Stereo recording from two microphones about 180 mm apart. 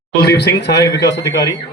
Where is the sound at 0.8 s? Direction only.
20° left (ahead or behind).